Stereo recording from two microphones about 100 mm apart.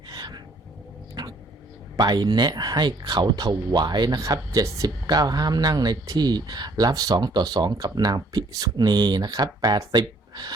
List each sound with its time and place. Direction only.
0.1 s a sound: 40° right (ahead or behind)
1.2 s dog: 40° right (ahead or behind)
2.0 s speech: 45° right (ahead or behind)